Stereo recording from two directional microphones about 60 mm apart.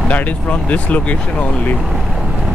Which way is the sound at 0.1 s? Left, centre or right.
Left.